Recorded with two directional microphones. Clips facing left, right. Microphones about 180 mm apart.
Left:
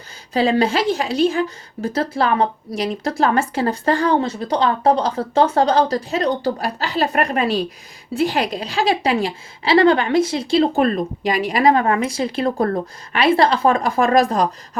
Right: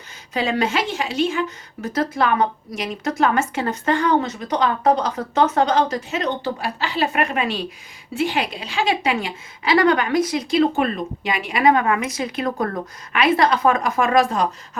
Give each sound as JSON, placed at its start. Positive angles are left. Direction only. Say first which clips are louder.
{"t": 0.3, "sound": "a woman's voice", "louder": "left 4 dB", "side_deg": 35}